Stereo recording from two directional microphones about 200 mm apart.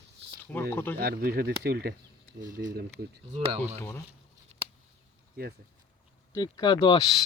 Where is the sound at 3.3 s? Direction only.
30° right (ahead or behind).